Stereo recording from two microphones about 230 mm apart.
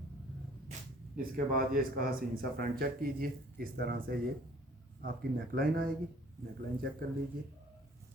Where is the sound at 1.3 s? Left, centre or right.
Right.